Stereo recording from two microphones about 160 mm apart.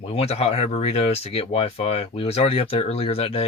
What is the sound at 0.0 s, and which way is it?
Speech, 40° left (ahead or behind).